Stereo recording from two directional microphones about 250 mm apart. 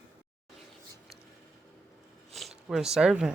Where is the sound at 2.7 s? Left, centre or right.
Centre.